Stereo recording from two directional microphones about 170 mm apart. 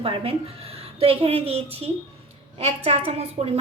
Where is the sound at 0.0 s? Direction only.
35° right (ahead or behind).